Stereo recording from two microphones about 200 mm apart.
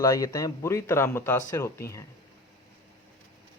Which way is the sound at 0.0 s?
15° left (ahead or behind).